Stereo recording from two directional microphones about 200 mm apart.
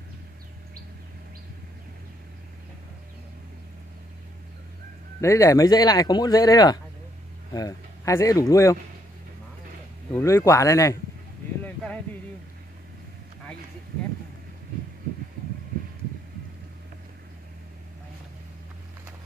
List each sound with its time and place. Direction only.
5.2 s speech: 15° left (ahead or behind)
10.1 s speech: 15° left (ahead or behind)
11.6 s a sound: 5° left (ahead or behind)